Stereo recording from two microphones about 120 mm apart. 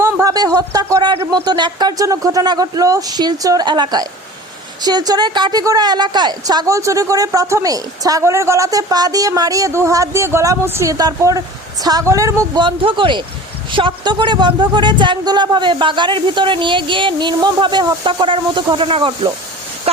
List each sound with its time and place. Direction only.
0.0 s a woman's voice: 25° right (ahead or behind)
12.5 s speech: 45° right (ahead or behind)